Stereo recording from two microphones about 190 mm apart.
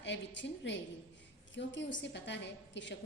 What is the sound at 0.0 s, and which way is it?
A woman's voice, 70° left (ahead or behind).